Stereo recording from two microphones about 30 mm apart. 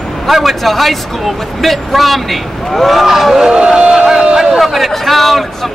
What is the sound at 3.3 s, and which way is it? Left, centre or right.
A man's voice, centre.